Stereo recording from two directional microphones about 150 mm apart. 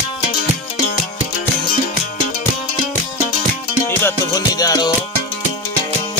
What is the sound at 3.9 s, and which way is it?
Music, 15° left (ahead or behind).